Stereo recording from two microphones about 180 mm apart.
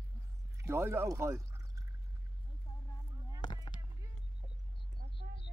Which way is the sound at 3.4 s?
25° left (ahead or behind).